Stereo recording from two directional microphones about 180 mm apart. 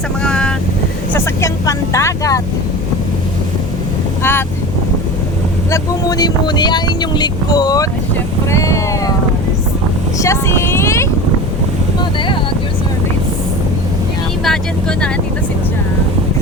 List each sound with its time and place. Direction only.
0.2 s boat: 5° left (ahead or behind)
1.1 s speech: 15° left (ahead or behind)
4.2 s vehicle: 10° left (ahead or behind)
5.7 s speech: 20° left (ahead or behind)
10.2 s speech: 15° left (ahead or behind)
14.4 s speech: 5° left (ahead or behind)